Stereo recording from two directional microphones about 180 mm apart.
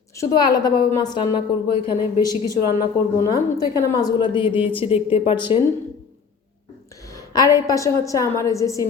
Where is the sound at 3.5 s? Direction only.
20° left (ahead or behind).